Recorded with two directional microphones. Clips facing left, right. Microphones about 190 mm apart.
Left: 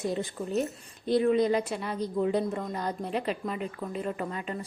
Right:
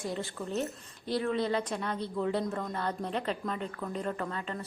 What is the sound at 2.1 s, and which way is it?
A woman's voice, 20° left (ahead or behind).